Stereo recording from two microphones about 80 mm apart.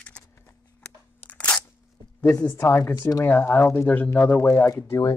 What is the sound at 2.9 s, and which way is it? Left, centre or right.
Speech, left.